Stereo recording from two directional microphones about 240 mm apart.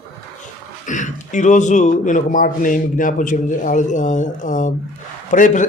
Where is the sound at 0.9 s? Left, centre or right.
Left.